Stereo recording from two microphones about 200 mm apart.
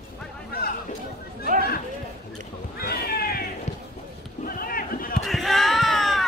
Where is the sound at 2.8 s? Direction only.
50° left (ahead or behind).